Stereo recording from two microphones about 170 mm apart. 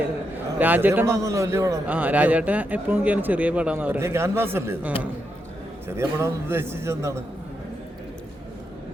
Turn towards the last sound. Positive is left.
turn(degrees=-15)  # may be behind; listen again after turning